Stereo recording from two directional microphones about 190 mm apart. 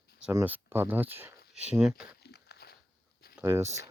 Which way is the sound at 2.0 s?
60° left (ahead or behind).